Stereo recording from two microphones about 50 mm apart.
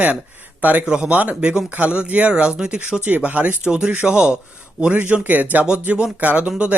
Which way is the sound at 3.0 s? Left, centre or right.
Right.